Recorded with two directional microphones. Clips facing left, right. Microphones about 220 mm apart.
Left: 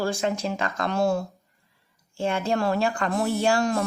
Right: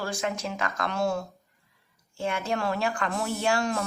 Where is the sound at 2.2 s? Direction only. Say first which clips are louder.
Left 4 dB; 30° left (ahead or behind).